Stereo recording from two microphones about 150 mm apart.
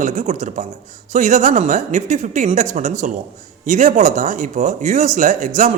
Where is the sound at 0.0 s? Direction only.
50° right (ahead or behind).